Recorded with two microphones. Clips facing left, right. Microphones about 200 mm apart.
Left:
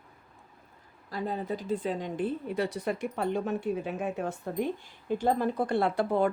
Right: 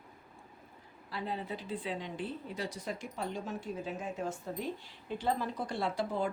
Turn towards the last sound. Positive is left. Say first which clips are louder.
# left 7 dB
turn(degrees=60)  # may be behind; listen again after turning